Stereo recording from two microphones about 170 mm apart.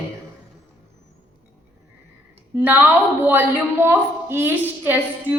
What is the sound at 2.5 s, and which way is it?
A woman's voice, 10° right (ahead or behind).